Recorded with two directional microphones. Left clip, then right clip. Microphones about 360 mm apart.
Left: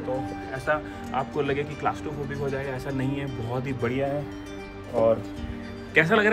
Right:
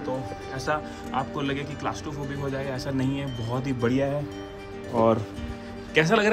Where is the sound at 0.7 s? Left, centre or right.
Centre.